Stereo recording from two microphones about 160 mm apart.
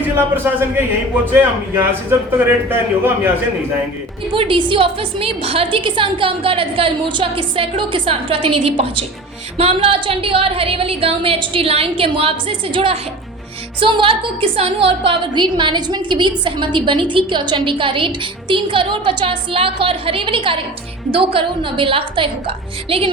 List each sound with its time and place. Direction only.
0.4 s a man's voice: 10° right (ahead or behind)
4.3 s a woman's voice: 30° right (ahead or behind)